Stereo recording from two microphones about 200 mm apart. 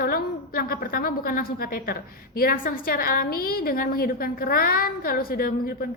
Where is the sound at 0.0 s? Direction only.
45° left (ahead or behind).